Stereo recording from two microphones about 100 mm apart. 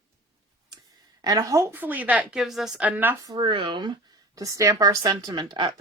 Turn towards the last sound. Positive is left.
turn(degrees=-50)  # may be behind; listen again after turning